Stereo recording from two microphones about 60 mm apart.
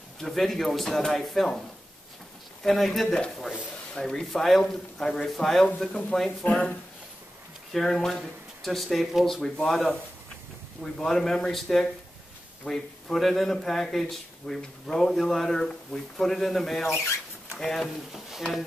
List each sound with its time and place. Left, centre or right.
0.2 s a man's voice: centre
2.6 s a man's voice: centre
5.8 s speech: centre
7.7 s a man's voice: centre